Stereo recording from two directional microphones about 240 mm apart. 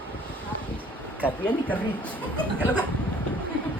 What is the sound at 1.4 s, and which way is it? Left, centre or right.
Speech, centre.